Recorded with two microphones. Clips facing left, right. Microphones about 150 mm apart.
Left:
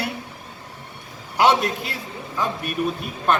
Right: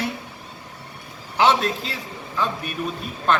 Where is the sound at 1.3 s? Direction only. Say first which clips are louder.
Left 1 dB; 10° left (ahead or behind).